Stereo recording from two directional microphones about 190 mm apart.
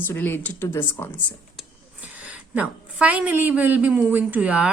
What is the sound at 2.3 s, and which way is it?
A woman's voice, 5° right (ahead or behind).